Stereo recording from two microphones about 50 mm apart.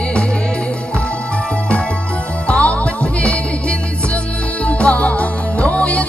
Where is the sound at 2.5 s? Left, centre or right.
Left.